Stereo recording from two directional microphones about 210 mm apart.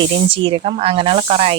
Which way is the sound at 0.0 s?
25° right (ahead or behind).